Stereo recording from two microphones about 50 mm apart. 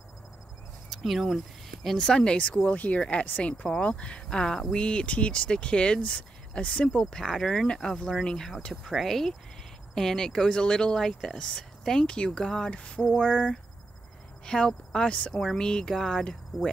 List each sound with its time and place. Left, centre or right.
1.0 s speech: centre
2.2 s speech: left
3.6 s speech: centre